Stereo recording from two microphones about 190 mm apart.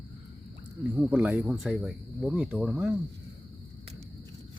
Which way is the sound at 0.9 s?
5° right (ahead or behind).